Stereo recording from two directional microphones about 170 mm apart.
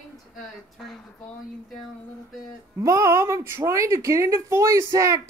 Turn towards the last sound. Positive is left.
turn(degrees=-20)  # may be behind; listen again after turning